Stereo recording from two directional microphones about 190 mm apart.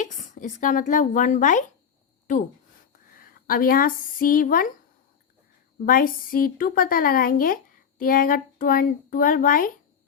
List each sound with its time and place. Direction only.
0.0 s speech: 40° left (ahead or behind)
3.2 s speech: 50° left (ahead or behind)
5.8 s speech: 50° left (ahead or behind)